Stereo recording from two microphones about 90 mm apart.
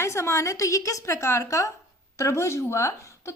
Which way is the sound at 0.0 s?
35° left (ahead or behind).